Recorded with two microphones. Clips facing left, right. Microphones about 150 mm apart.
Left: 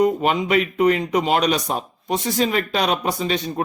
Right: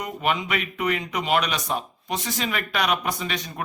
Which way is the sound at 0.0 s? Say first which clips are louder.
Left 8 dB; 35° left (ahead or behind).